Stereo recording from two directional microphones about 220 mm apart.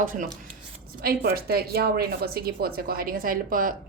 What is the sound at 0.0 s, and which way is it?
A woman's voice, 40° right (ahead or behind).